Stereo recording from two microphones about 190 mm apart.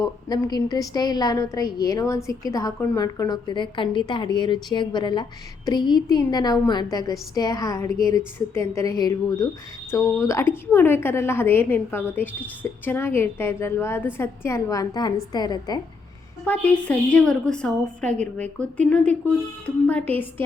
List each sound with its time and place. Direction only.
0.0 s a woman's voice: 20° left (ahead or behind)
16.4 s a woman's voice: 5° left (ahead or behind)